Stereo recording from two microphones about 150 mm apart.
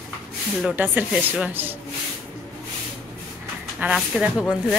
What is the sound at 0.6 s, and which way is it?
Speech, 5° right (ahead or behind).